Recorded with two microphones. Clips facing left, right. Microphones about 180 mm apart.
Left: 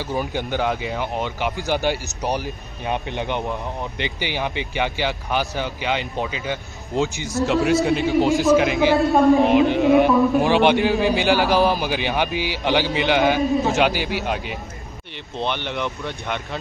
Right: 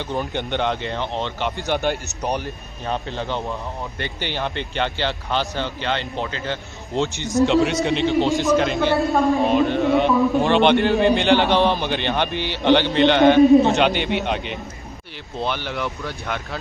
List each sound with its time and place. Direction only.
0.0 s a man's voice: 5° left (ahead or behind)
9.4 s a man's voice: 15° left (ahead or behind)
9.9 s a man's voice: 5° left (ahead or behind)
15.4 s speech: 5° right (ahead or behind)